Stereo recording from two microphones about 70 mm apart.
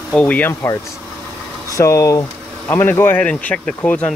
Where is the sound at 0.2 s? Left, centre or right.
Left.